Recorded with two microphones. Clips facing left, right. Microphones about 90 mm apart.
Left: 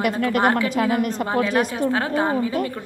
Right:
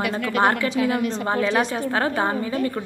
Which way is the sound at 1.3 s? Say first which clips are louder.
Right 1 dB; 5° left (ahead or behind).